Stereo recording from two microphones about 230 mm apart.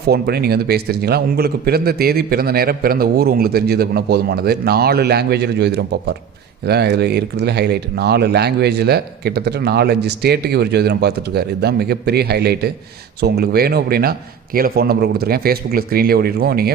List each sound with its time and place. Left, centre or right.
0.1 s a man's voice: right